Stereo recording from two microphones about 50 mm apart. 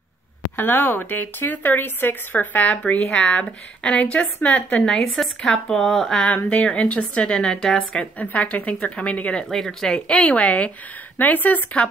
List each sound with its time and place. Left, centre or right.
0.6 s speech: left
4.8 s speech: centre
6.2 s a woman's voice: left
8.2 s a woman's voice: left
9.5 s speech: centre
9.9 s a woman's voice: left